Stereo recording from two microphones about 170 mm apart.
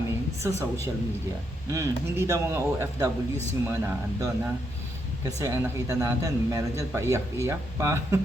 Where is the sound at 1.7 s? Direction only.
15° right (ahead or behind).